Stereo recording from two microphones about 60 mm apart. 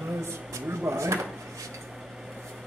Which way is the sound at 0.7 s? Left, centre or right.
Right.